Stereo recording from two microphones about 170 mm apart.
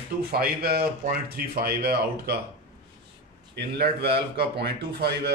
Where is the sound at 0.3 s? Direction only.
65° right (ahead or behind).